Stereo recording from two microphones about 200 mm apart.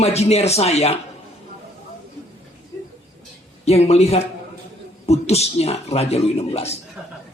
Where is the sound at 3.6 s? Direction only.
30° left (ahead or behind).